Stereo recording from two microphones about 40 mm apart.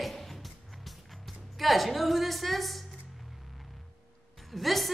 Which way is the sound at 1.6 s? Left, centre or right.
Centre.